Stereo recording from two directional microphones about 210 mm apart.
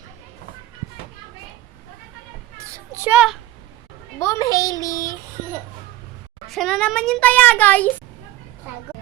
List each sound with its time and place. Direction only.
2.7 s child singing: 10° right (ahead or behind)
4.2 s a child's voice: 15° left (ahead or behind)
6.5 s a child's voice: centre (ahead or behind)